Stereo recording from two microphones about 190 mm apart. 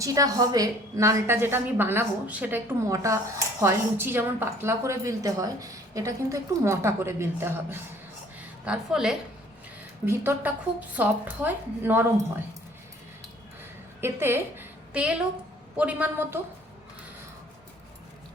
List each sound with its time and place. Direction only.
0.0 s a woman's voice: 20° right (ahead or behind)
14.0 s a woman's voice: 10° right (ahead or behind)